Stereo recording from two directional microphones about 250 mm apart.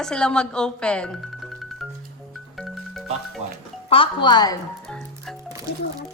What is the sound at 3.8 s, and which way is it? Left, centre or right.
Speech, left.